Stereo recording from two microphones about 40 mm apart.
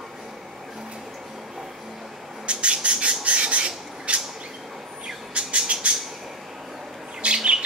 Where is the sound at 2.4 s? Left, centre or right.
Right.